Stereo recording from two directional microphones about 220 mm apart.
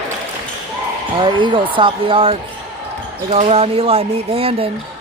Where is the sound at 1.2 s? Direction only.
20° right (ahead or behind).